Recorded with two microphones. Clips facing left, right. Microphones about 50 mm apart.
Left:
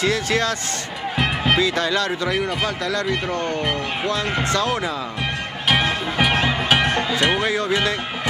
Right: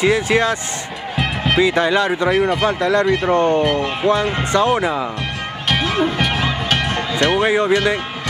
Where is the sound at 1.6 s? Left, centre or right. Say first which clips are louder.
Right 5 dB; right.